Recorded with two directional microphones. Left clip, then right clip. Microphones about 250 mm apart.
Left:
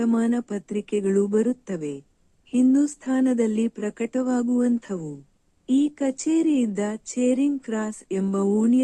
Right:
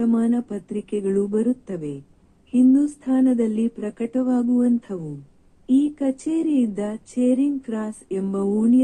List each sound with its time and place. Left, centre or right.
0.0 s speech: left